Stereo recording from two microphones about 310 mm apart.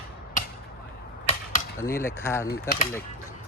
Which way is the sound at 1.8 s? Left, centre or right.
Centre.